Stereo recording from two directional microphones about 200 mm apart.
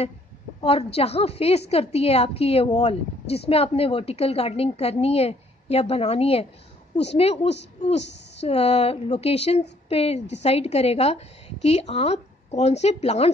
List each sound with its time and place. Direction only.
0.6 s a woman's voice: 30° left (ahead or behind)